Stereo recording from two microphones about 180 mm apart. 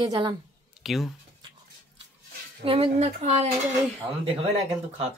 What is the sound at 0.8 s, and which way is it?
Speech, centre (ahead or behind).